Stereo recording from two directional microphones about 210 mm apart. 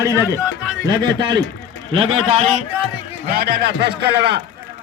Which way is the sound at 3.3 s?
45° right (ahead or behind).